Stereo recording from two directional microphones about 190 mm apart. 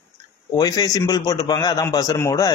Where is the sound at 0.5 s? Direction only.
20° left (ahead or behind).